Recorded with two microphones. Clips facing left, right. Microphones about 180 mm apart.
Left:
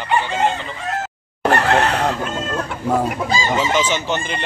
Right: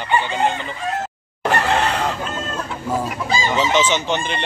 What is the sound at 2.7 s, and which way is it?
Chicken, 60° left (ahead or behind).